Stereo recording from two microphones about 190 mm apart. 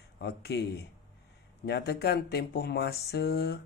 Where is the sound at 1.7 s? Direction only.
60° left (ahead or behind).